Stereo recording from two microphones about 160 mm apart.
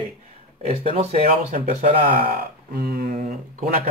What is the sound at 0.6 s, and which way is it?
Speech, 35° right (ahead or behind).